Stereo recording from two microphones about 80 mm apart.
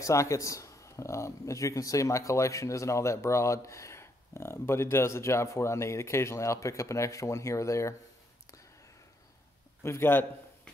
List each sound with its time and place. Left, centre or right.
0.0 s speech: left
9.8 s speech: left